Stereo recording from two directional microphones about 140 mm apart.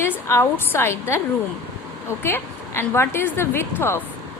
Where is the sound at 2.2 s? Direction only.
15° left (ahead or behind).